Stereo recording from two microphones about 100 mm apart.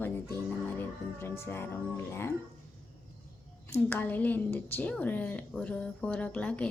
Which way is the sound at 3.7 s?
20° left (ahead or behind).